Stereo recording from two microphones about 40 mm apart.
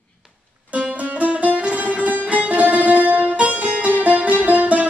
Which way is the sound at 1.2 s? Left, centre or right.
Right.